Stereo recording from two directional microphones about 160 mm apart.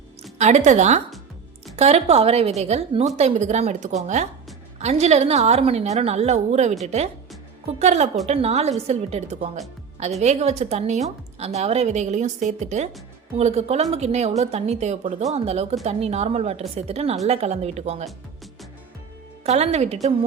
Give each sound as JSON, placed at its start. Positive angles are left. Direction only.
{"t": 0.2, "sound": "a woman's voice", "side_deg": -45}
{"t": 19.5, "sound": "a woman's voice", "side_deg": -40}